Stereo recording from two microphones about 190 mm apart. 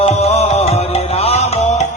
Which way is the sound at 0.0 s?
35° left (ahead or behind).